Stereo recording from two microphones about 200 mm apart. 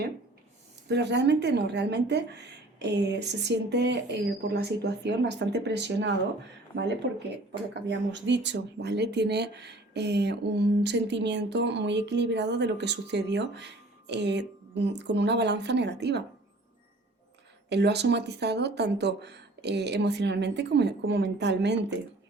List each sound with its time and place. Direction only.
0.9 s speech: 60° right (ahead or behind)
7.7 s speech: 60° right (ahead or behind)
17.7 s speech: 55° right (ahead or behind)